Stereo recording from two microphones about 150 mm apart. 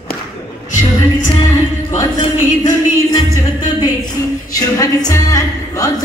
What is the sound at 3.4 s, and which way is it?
Music, 25° left (ahead or behind).